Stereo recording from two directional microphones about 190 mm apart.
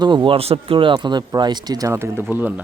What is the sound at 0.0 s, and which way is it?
Speech, 25° right (ahead or behind).